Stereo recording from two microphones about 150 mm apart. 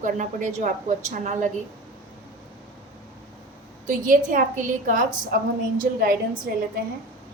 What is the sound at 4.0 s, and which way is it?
A woman's voice, 60° right (ahead or behind).